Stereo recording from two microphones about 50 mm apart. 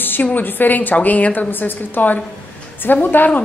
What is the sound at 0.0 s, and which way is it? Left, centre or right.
A woman's voice, left.